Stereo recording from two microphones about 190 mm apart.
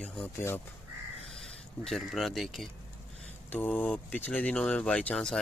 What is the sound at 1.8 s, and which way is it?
Speech, centre (ahead or behind).